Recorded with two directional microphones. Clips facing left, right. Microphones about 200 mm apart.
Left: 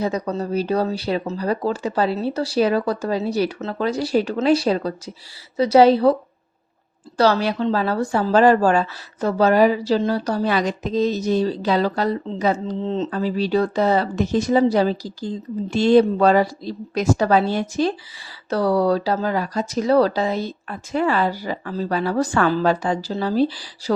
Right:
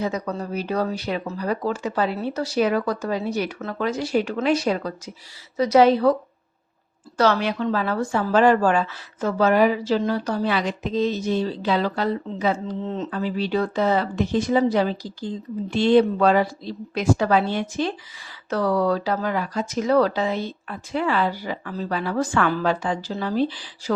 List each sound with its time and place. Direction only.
0.0 s a woman's voice: 35° left (ahead or behind)
7.2 s a woman's voice: 35° left (ahead or behind)
13.1 s a woman's voice: 40° left (ahead or behind)